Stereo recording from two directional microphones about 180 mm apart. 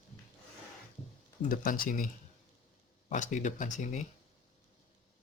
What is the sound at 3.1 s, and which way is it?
Speech, 45° left (ahead or behind).